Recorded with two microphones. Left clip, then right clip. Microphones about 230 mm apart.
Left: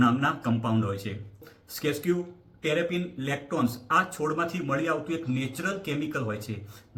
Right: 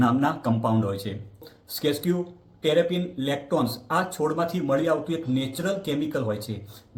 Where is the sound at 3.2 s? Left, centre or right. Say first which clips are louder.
Right 4 dB; left.